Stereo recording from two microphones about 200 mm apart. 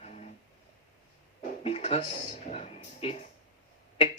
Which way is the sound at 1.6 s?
30° left (ahead or behind).